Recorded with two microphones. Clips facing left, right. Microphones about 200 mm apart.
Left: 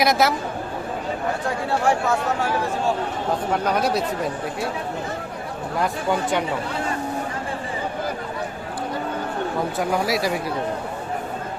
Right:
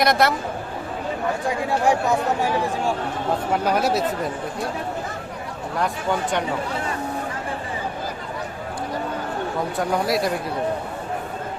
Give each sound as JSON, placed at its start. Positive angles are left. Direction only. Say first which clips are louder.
{"t": 0.0, "sound": "speech", "louder": "even", "side_deg": 0}
{"t": 1.5, "sound": "speech", "louder": "right 1 dB", "side_deg": -15}
{"t": 3.5, "sound": "speech", "louder": "right 1 dB", "side_deg": -5}
{"t": 9.7, "sound": "speech", "louder": "right 2 dB", "side_deg": 0}